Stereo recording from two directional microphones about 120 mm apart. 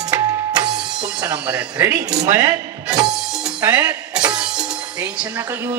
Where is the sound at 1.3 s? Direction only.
15° right (ahead or behind).